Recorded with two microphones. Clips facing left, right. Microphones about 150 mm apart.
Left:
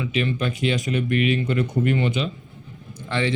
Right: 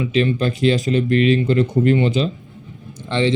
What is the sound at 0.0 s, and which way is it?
Speech, 30° right (ahead or behind).